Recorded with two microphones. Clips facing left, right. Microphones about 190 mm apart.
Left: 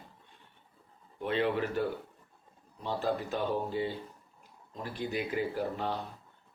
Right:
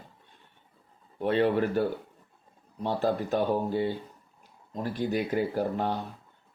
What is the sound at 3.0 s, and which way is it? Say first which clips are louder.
Speech: right 5 dB; 45° right (ahead or behind).